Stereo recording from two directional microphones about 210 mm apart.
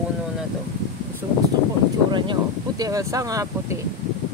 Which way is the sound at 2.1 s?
20° right (ahead or behind).